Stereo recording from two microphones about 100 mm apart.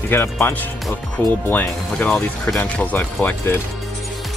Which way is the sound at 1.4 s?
15° left (ahead or behind).